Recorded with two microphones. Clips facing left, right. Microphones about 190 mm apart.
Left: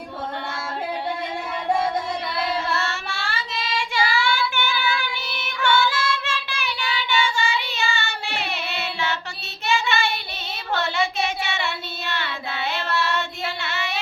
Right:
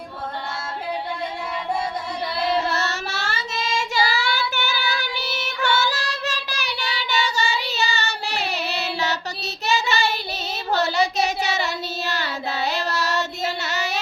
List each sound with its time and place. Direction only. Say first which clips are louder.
2.6 s child singing: right 1 dB; 40° right (ahead or behind)